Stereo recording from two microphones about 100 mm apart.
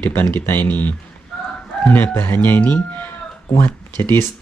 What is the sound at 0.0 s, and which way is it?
Speech, 25° left (ahead or behind).